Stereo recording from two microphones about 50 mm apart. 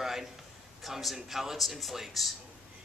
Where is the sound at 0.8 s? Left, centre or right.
Centre.